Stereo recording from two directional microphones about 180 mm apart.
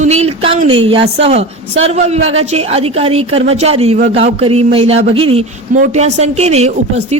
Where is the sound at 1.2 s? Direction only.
35° right (ahead or behind).